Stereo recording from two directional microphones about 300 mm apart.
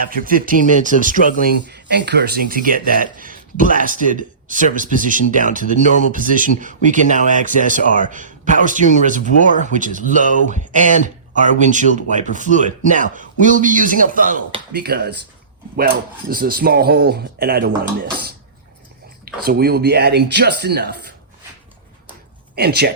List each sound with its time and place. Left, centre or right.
0.1 s speech: right
16.3 s speech: right
19.2 s speech: right
22.5 s speech: right